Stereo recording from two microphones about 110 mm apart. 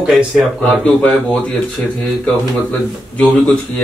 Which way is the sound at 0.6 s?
10° left (ahead or behind).